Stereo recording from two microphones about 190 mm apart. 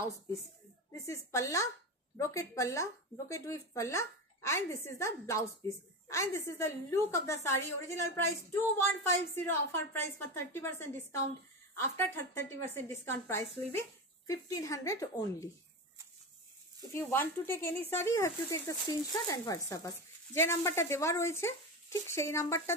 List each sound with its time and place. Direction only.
0.9 s a woman's voice: 15° left (ahead or behind)
16.9 s a woman's voice: 10° left (ahead or behind)